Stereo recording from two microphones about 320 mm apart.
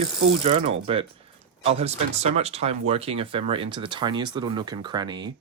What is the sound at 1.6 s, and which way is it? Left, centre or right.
Speech, centre.